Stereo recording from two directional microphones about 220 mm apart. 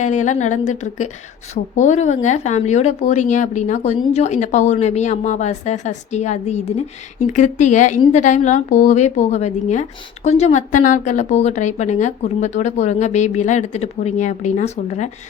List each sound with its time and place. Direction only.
0.0 s speech: 35° left (ahead or behind)